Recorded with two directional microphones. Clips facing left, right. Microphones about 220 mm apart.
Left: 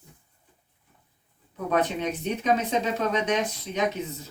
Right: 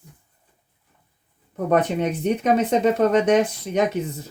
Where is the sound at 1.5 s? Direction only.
55° right (ahead or behind).